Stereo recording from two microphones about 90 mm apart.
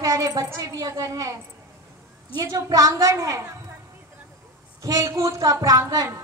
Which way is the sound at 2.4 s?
45° right (ahead or behind).